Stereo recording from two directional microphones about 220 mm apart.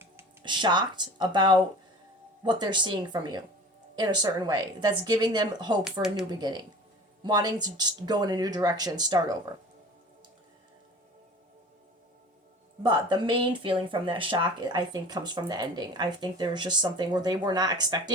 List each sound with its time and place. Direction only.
0.4 s speech: 20° right (ahead or behind)
12.8 s speech: 20° right (ahead or behind)